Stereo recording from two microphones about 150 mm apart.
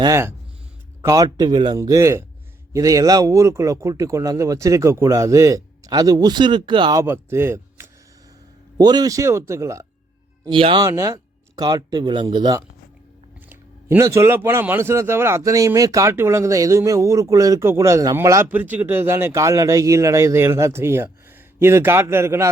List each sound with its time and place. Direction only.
0.0 s speech: 20° right (ahead or behind)
7.0 s speech: 15° right (ahead or behind)
8.8 s speech: 25° right (ahead or behind)
10.5 s speech: 35° right (ahead or behind)
10.8 s speech: 20° right (ahead or behind)
13.5 s speech: 15° right (ahead or behind)